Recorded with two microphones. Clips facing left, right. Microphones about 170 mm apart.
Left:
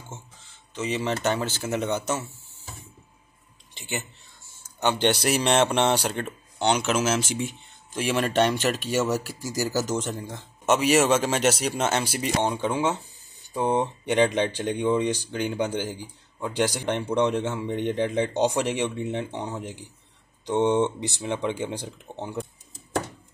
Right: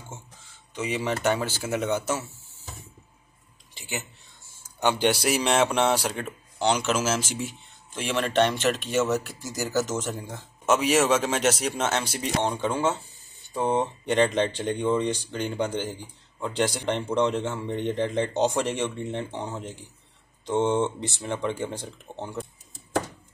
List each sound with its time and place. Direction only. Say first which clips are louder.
0.7 s speech: left 1 dB; 10° right (ahead or behind)
3.7 s a sound: left 2 dB; 5° right (ahead or behind)
4.7 s speech: even; 10° right (ahead or behind)
10.6 s speech: left 1 dB; centre (ahead or behind)